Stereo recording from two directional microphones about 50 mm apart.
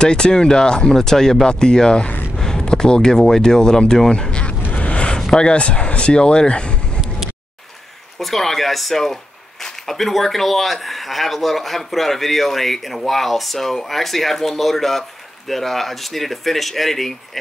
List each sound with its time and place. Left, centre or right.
0.0 s speech: centre
4.7 s a sound: left
5.2 s speech: centre
8.2 s speech: centre